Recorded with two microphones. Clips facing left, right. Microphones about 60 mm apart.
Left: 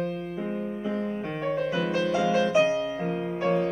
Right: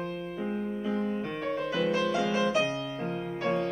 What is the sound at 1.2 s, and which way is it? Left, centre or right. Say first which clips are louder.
Music: left 4 dB; centre.